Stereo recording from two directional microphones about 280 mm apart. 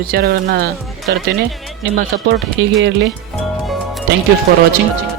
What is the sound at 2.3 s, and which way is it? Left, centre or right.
Speech, right.